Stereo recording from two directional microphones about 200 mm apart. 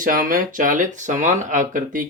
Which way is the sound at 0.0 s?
45° right (ahead or behind).